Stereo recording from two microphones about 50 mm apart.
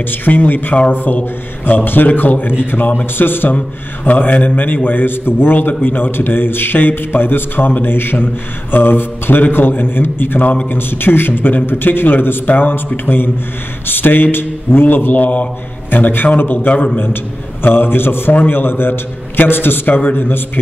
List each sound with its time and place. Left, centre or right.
0.1 s a man's voice: left